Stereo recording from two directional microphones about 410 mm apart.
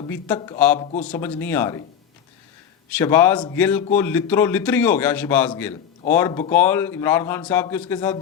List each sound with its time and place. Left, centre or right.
0.0 s speech: centre
1.1 s a man's voice: centre
3.0 s a man's voice: centre